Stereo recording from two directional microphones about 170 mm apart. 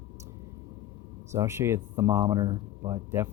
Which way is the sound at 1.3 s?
15° right (ahead or behind).